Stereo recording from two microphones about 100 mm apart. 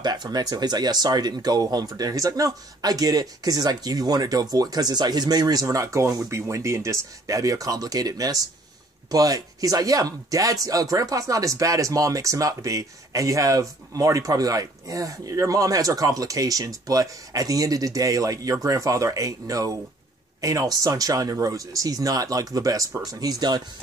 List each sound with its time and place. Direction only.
0.0 s speech: 45° right (ahead or behind)